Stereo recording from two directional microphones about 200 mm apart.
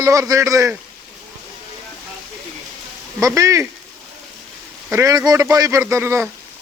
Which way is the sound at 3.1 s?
15° right (ahead or behind).